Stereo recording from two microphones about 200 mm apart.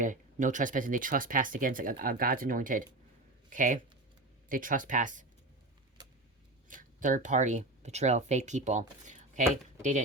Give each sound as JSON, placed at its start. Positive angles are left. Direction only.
{"t": 0.0, "sound": "speech", "side_deg": -40}
{"t": 6.7, "sound": "speech", "side_deg": -40}
{"t": 9.0, "sound": "a sound", "side_deg": -35}